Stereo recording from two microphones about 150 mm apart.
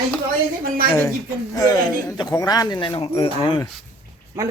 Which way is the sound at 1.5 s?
25° left (ahead or behind).